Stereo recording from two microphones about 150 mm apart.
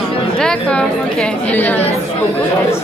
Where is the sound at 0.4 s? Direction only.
5° left (ahead or behind).